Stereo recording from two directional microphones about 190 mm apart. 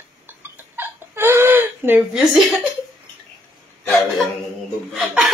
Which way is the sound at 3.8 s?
Centre (ahead or behind).